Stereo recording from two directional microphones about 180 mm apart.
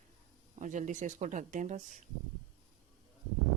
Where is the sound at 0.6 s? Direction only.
45° right (ahead or behind).